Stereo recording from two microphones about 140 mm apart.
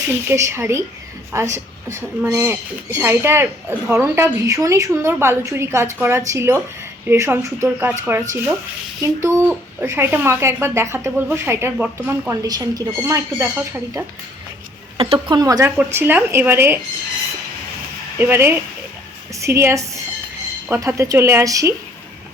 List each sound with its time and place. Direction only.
0.1 s a woman's voice: 20° right (ahead or behind)
12.4 s a woman's voice: 25° right (ahead or behind)
14.9 s speech: 40° right (ahead or behind)
15.4 s a woman's voice: 25° right (ahead or behind)
15.8 s speech: 15° right (ahead or behind)
18.2 s a woman's voice: 15° right (ahead or behind)